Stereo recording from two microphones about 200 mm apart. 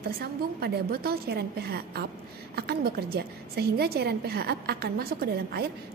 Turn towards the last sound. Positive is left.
turn(degrees=-50)  # may be behind; listen again after turning